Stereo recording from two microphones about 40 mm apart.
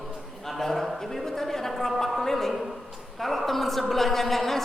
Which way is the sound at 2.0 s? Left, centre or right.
Centre.